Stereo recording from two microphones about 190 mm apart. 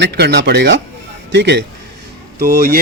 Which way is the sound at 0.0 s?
60° right (ahead or behind).